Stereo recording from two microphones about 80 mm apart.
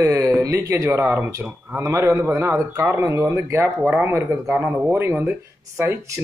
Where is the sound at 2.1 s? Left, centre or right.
Right.